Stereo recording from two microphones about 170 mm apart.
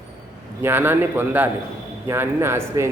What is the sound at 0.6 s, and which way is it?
A man's voice, 10° right (ahead or behind).